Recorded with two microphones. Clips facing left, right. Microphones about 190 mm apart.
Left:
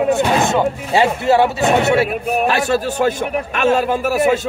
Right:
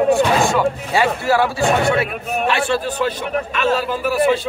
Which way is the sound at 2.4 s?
40° left (ahead or behind).